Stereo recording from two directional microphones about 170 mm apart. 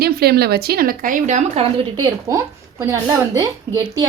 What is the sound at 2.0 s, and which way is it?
Speech, 20° right (ahead or behind).